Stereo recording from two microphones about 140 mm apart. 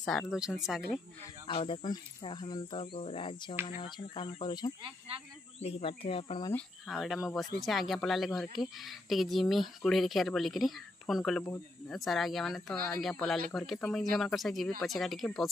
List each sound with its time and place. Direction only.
0.3 s speech: 5° right (ahead or behind)
1.5 s speech: 35° left (ahead or behind)
5.6 s speech: 45° left (ahead or behind)
6.9 s speech: centre (ahead or behind)